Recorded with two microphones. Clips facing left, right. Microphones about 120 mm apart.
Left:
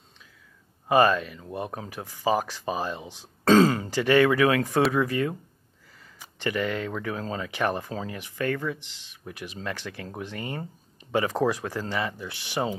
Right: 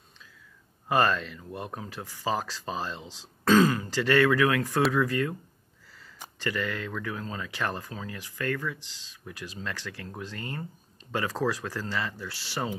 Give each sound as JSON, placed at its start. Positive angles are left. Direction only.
{"t": 0.8, "sound": "speech", "side_deg": 15}
{"t": 6.4, "sound": "speech", "side_deg": 20}